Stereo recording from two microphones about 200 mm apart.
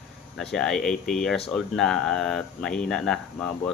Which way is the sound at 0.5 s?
Centre (ahead or behind).